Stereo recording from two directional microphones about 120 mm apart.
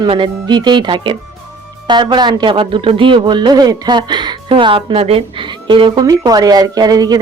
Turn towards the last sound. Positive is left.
turn(degrees=-35)  # may be behind; listen again after turning